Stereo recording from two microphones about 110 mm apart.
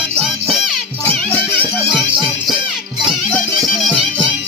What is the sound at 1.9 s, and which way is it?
Music, centre (ahead or behind).